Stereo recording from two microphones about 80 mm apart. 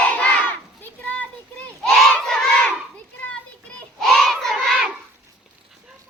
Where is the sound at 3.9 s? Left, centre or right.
Centre.